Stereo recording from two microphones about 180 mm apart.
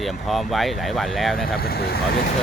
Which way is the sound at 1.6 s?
60° left (ahead or behind).